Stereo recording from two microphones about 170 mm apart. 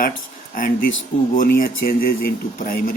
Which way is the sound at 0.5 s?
55° left (ahead or behind).